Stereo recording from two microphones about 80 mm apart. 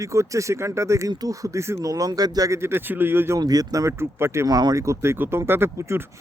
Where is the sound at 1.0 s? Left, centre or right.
Right.